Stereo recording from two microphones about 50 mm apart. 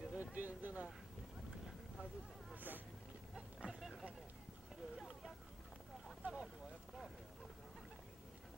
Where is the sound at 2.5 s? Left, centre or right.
Right.